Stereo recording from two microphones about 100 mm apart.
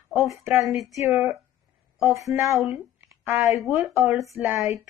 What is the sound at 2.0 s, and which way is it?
Speech, 30° right (ahead or behind).